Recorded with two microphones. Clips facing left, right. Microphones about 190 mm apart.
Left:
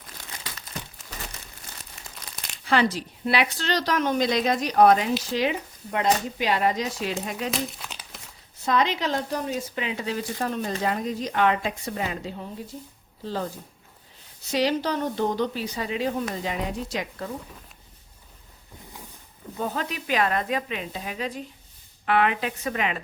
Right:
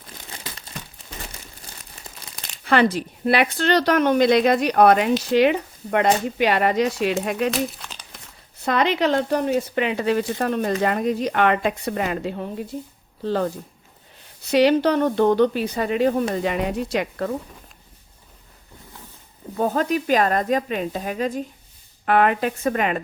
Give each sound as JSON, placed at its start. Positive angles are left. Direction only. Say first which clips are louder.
{"t": 0.4, "sound": "crumpling", "louder": "right 3 dB", "side_deg": -30}
{"t": 2.6, "sound": "speech", "louder": "right 4 dB", "side_deg": -55}
{"t": 7.5, "sound": "crumpling", "louder": "right 5 dB", "side_deg": 0}
{"t": 8.6, "sound": "speech", "louder": "right 4 dB", "side_deg": -65}
{"t": 19.5, "sound": "a woman's voice", "louder": "right 9 dB", "side_deg": -45}